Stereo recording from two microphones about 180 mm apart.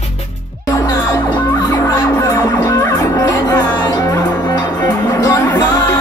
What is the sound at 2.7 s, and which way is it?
Music, 20° left (ahead or behind).